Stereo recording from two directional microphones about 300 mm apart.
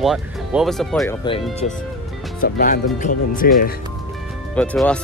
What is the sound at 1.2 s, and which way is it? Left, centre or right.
Speech, centre.